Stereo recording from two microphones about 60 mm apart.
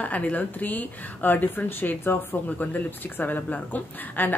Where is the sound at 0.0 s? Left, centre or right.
Left.